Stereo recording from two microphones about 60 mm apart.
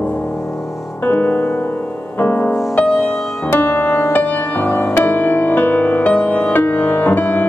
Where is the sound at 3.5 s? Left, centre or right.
Left.